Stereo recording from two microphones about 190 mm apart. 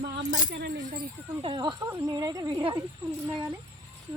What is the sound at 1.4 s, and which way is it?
Speech, 25° right (ahead or behind).